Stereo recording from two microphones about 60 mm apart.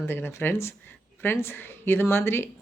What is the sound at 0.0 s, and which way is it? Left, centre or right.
A woman's voice, left.